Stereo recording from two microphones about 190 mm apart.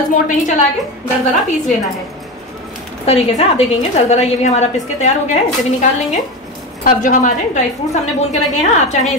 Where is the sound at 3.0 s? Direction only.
30° left (ahead or behind).